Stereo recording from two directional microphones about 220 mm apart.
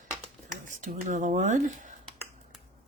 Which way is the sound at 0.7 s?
35° right (ahead or behind).